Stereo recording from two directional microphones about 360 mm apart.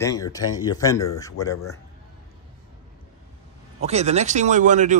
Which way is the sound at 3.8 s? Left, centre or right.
Centre.